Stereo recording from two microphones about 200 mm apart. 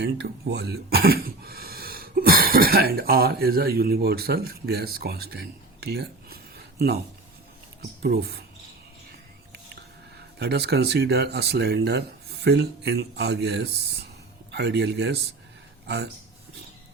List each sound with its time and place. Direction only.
0.0 s speech: 55° right (ahead or behind)
8.0 s speech: 50° right (ahead or behind)
10.4 s speech: 55° right (ahead or behind)